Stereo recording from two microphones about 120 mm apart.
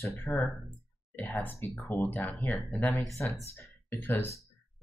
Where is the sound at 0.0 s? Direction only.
20° left (ahead or behind).